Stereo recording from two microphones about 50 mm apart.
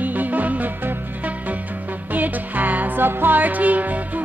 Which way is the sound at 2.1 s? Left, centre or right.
Right.